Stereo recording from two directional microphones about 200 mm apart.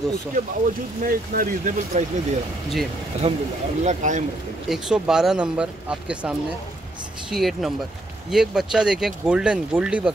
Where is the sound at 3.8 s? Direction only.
40° right (ahead or behind).